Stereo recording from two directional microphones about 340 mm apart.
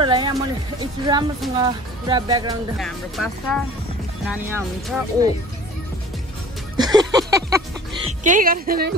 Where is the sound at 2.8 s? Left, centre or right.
Centre.